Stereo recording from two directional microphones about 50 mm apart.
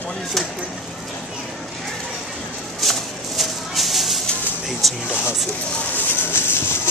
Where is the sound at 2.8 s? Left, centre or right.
Centre.